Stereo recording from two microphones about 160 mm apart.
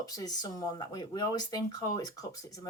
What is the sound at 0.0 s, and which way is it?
Speech, 25° left (ahead or behind).